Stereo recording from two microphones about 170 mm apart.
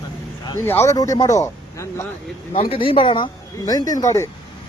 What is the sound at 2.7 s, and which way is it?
Speech, 30° left (ahead or behind).